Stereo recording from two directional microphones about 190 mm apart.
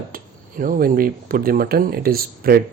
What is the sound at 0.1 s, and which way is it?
Speech, 45° right (ahead or behind).